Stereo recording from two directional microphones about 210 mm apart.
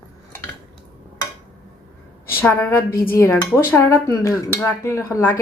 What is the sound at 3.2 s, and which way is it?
Speech, 15° left (ahead or behind).